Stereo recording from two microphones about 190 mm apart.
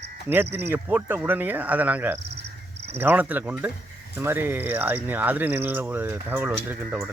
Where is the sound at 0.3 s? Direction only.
10° right (ahead or behind).